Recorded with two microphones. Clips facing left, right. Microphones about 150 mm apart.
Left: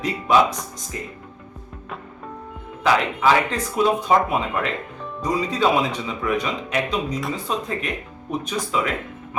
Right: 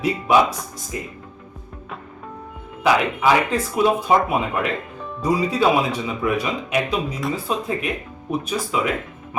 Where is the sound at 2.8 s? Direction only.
10° right (ahead or behind).